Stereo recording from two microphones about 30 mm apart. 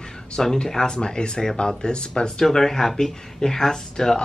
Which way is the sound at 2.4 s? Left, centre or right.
Centre.